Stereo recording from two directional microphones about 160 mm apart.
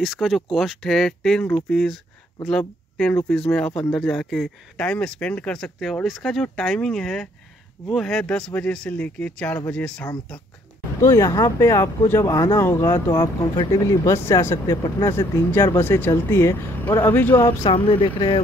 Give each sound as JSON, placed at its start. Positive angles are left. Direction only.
{"t": 0.0, "sound": "speech", "side_deg": -5}
{"t": 3.0, "sound": "speech", "side_deg": 5}
{"t": 11.0, "sound": "speech", "side_deg": 20}
{"t": 17.6, "sound": "speech", "side_deg": 35}